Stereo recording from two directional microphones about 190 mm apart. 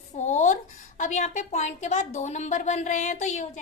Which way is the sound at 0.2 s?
40° left (ahead or behind).